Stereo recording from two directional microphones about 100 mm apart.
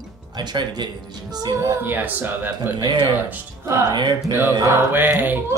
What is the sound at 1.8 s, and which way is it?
Speech, 20° right (ahead or behind).